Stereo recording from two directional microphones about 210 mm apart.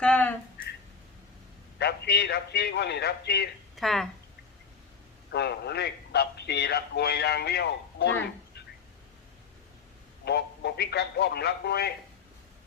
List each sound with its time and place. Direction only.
0.0 s a sound: 5° left (ahead or behind)
1.8 s a man's voice: 50° left (ahead or behind)
3.8 s speech: centre (ahead or behind)
5.3 s a man's voice: 50° left (ahead or behind)
10.2 s a man's voice: 50° left (ahead or behind)